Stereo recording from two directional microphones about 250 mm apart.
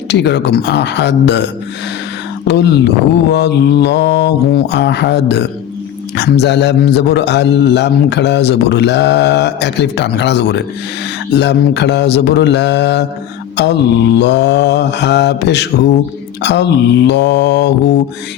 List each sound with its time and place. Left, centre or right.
0.1 s a man's voice: left
2.5 s a man's voice: left